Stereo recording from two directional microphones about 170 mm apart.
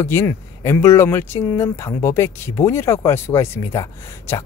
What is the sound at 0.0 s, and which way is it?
Speech, 15° left (ahead or behind).